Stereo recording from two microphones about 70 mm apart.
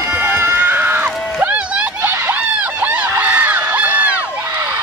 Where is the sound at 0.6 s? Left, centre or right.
Right.